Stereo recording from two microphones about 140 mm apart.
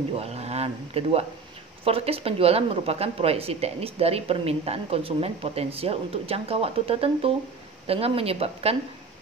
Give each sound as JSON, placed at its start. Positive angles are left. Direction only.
{"t": 0.2, "sound": "speech", "side_deg": -50}